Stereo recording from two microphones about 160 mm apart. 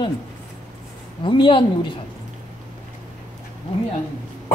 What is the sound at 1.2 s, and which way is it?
Speech, 30° left (ahead or behind).